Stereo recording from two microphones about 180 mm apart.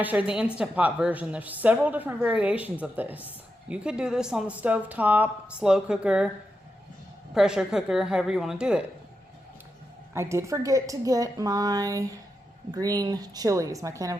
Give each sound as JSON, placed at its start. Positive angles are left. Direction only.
{"t": 0.0, "sound": "a woman's voice", "side_deg": -10}
{"t": 7.3, "sound": "speech", "side_deg": -5}
{"t": 10.2, "sound": "a woman's voice", "side_deg": -15}